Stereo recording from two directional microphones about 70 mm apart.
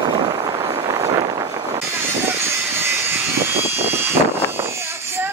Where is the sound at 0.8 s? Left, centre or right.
Right.